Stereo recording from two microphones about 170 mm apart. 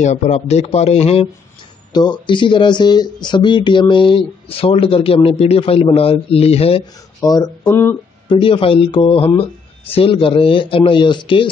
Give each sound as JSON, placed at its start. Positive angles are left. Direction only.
{"t": 0.0, "sound": "speech", "side_deg": 40}
{"t": 1.9, "sound": "speech", "side_deg": 25}
{"t": 7.2, "sound": "speech", "side_deg": 25}
{"t": 8.3, "sound": "speech", "side_deg": 30}